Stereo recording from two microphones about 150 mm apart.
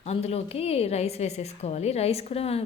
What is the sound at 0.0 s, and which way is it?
A woman's voice, 45° left (ahead or behind).